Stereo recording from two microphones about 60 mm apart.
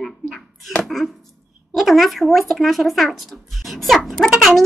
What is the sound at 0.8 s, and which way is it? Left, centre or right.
Chopping, centre.